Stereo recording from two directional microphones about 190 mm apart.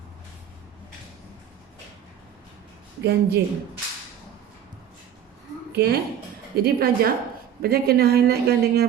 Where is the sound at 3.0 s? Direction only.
60° right (ahead or behind).